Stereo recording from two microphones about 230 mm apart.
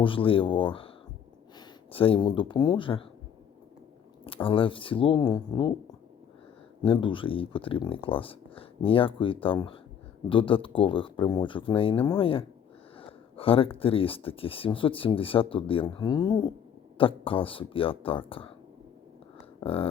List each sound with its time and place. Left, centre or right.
0.0 s speech: left
4.4 s speech: left
6.8 s speech: left
19.5 s a sound: left